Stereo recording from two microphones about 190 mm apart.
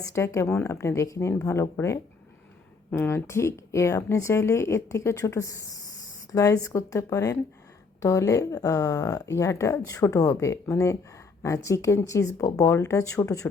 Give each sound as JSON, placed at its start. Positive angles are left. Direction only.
{"t": 0.0, "sound": "speech", "side_deg": 15}